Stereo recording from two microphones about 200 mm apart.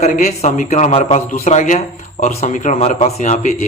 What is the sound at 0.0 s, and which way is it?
A man's voice, 35° left (ahead or behind).